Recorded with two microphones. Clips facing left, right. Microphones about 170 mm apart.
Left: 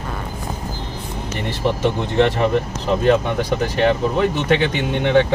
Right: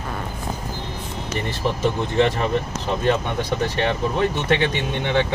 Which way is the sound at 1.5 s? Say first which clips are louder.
Left 4 dB; 65° left (ahead or behind).